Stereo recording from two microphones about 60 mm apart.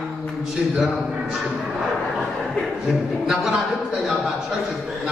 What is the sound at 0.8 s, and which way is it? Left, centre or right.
Speech, centre.